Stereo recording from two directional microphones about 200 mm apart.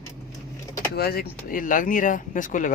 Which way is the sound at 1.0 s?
50° left (ahead or behind).